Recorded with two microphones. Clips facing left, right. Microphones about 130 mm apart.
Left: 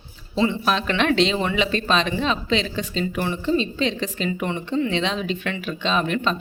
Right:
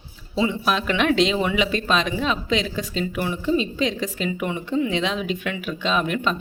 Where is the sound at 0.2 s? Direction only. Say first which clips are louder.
Left 1 dB; 5° right (ahead or behind).